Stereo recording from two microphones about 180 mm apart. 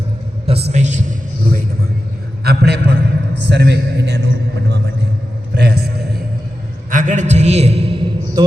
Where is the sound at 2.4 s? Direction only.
65° right (ahead or behind).